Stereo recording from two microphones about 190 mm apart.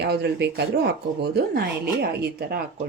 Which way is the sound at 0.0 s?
60° right (ahead or behind).